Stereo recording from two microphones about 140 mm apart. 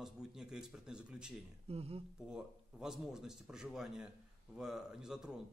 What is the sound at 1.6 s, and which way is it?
Speech, 45° right (ahead or behind).